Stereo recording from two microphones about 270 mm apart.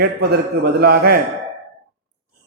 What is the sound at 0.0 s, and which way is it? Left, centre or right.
A man's voice, right.